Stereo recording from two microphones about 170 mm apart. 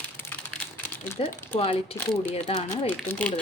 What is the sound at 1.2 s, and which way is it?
Speech, 35° left (ahead or behind).